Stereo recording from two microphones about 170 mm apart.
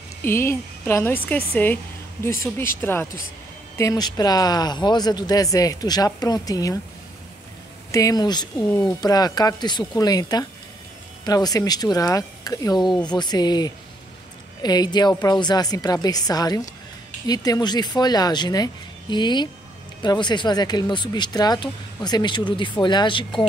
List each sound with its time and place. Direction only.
0.2 s a woman's voice: 15° left (ahead or behind)
7.9 s speech: 20° left (ahead or behind)